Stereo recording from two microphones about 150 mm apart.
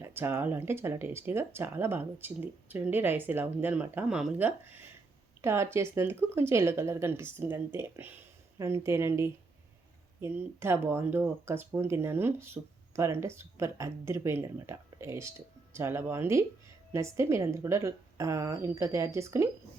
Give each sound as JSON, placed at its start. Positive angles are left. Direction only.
{"t": 0.0, "sound": "a woman's voice", "side_deg": -15}